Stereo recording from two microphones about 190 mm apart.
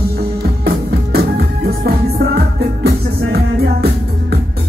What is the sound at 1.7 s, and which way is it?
Music, 55° right (ahead or behind).